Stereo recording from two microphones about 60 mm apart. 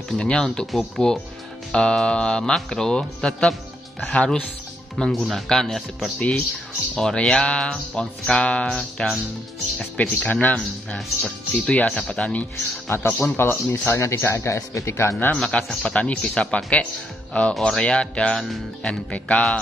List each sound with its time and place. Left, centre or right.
0.2 s speech: centre
4.9 s speech: centre
6.1 s speech: left
9.9 s speech: left
12.8 s speech: left
14.0 s speech: left
15.3 s speech: centre
17.6 s speech: centre
17.8 s speech: centre